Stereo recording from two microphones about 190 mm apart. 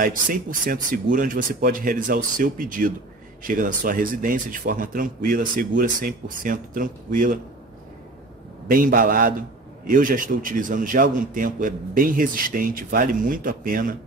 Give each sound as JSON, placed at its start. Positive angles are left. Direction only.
{"t": 0.0, "sound": "a man's voice", "side_deg": -45}
{"t": 8.6, "sound": "a man's voice", "side_deg": -45}